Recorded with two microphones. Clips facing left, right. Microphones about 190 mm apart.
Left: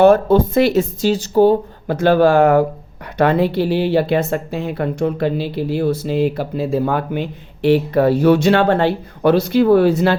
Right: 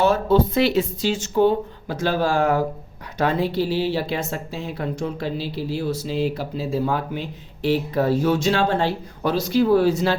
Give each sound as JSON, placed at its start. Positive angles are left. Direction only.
{"t": 0.0, "sound": "speech", "side_deg": 50}
{"t": 1.9, "sound": "speech", "side_deg": 60}